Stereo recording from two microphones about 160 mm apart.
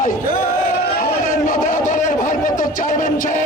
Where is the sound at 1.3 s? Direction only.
55° left (ahead or behind).